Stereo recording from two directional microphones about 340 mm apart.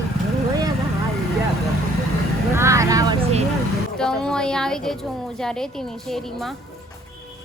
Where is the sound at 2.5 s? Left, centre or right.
Centre.